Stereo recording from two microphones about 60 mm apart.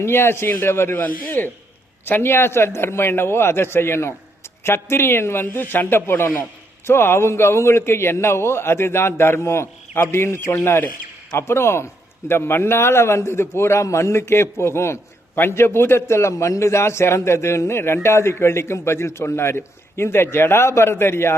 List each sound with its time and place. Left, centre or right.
0.0 s a man's voice: left
1.0 s a man's voice: left